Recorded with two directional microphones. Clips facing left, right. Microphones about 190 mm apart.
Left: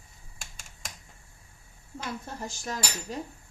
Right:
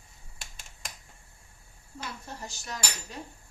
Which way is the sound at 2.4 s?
50° left (ahead or behind).